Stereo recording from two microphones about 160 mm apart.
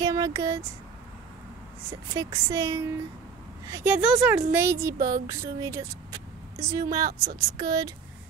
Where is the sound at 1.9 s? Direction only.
20° right (ahead or behind).